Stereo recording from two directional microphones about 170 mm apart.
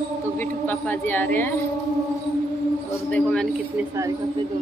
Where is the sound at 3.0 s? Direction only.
5° left (ahead or behind).